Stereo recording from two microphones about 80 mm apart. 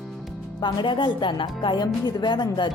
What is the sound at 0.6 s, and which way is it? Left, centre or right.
Speech, left.